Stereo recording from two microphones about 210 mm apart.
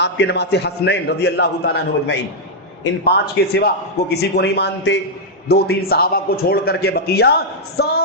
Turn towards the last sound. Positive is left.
turn(degrees=50)  # may be behind; listen again after turning